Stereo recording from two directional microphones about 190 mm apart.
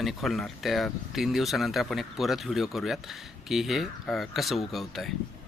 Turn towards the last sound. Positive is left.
turn(degrees=0)  # may be behind; listen again after turning